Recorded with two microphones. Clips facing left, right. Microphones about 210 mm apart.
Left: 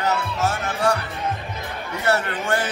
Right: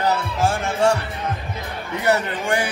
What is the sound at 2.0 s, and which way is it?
Speech, 15° right (ahead or behind).